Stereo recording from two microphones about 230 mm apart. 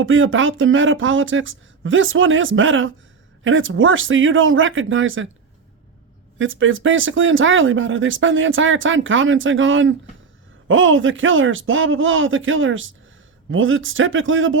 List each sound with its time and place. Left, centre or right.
0.0 s speech: right
6.4 s speech: right